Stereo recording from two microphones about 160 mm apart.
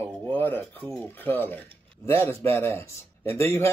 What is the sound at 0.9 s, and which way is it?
Speech, 10° left (ahead or behind).